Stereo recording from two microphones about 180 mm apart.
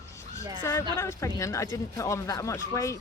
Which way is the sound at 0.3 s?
15° left (ahead or behind).